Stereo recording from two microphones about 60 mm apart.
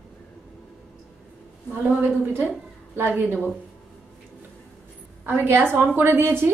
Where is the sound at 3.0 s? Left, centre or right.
Right.